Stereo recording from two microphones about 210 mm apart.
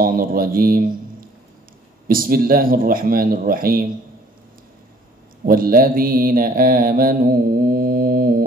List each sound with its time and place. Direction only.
0.0 s a man's voice: 45° right (ahead or behind)
5.4 s mantra: 45° right (ahead or behind)